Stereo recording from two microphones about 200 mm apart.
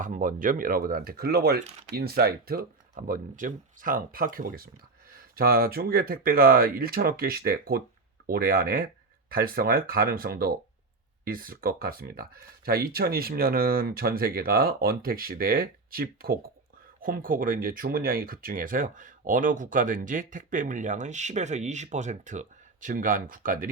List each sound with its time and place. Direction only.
0.0 s speech: 40° right (ahead or behind)